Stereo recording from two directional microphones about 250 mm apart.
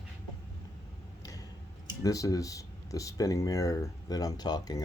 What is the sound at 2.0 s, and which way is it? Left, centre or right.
Speech, centre.